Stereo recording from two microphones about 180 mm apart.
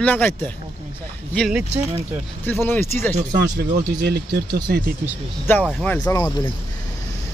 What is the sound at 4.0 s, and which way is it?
Speech, 60° right (ahead or behind).